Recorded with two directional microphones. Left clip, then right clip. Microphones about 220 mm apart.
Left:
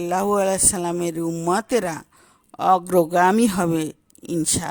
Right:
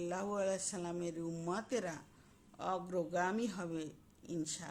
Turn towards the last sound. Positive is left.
turn(degrees=50)  # may be behind; listen again after turning